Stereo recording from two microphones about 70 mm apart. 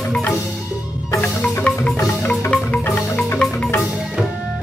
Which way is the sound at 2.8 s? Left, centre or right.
Left.